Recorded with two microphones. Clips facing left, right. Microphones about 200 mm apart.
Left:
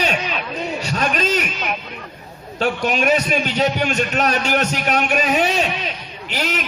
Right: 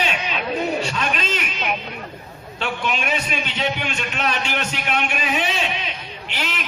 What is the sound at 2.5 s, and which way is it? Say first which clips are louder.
A man's voice: left 6 dB; 40° left (ahead or behind).